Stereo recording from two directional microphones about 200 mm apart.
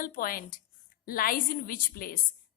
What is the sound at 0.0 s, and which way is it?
A woman's voice, 45° left (ahead or behind).